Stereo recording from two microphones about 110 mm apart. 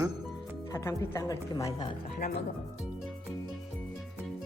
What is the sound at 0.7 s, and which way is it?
A woman's voice, 30° left (ahead or behind).